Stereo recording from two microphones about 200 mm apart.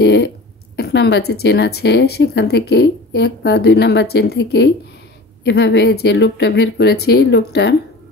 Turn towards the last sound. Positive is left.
turn(degrees=60)  # may be behind; listen again after turning